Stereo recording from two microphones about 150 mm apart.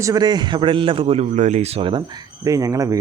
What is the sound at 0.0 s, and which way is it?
Speech, 25° right (ahead or behind).